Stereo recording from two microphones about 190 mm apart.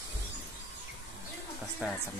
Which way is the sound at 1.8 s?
5° right (ahead or behind).